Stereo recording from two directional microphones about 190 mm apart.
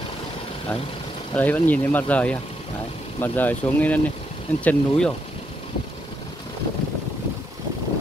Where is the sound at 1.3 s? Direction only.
10° left (ahead or behind).